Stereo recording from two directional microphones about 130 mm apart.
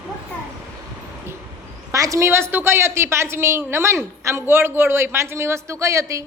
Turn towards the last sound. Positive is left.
turn(degrees=-25)  # may be behind; listen again after turning